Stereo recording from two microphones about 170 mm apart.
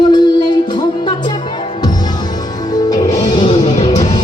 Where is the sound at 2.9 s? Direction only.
20° left (ahead or behind).